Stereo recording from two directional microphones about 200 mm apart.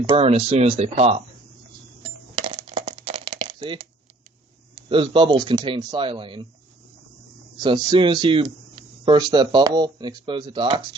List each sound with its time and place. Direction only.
0.1 s speech: 30° right (ahead or behind)
2.3 s coin: 30° right (ahead or behind)
4.7 s speech: 25° right (ahead or behind)
7.6 s speech: 20° right (ahead or behind)